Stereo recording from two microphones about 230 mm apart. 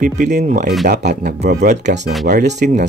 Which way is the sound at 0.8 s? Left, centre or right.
Right.